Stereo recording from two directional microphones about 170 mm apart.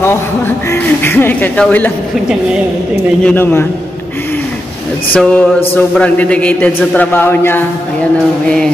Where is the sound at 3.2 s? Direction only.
10° left (ahead or behind).